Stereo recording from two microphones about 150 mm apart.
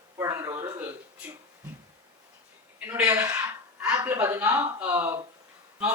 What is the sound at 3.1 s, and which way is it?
A man's voice, 20° right (ahead or behind).